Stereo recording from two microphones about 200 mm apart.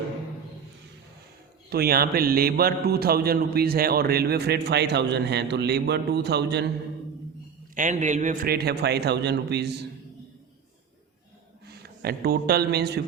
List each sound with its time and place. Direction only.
1.7 s a man's voice: 50° right (ahead or behind)
7.8 s a man's voice: 40° right (ahead or behind); by 9.8 s 55° right (ahead or behind)
11.8 s a man's voice: 50° right (ahead or behind)